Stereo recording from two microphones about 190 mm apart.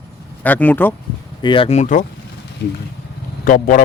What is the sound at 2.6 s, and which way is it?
Speech, 60° left (ahead or behind).